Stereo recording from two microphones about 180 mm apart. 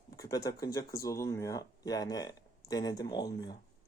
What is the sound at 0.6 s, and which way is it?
Speech, 20° left (ahead or behind).